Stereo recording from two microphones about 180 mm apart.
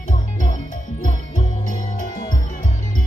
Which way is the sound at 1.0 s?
45° left (ahead or behind).